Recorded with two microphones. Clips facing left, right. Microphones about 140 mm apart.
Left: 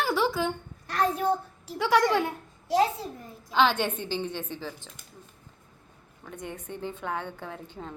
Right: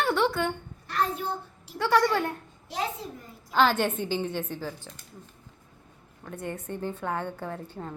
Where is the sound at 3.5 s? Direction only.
5° right (ahead or behind).